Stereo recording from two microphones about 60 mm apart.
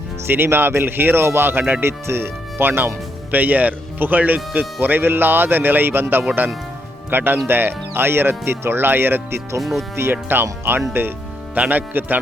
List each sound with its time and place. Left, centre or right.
0.3 s speech: right
1.8 s speech: right
9.6 s speech: centre
9.9 s speech: right